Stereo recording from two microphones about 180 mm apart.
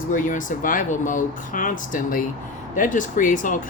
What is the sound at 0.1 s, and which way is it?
Speech, 45° left (ahead or behind).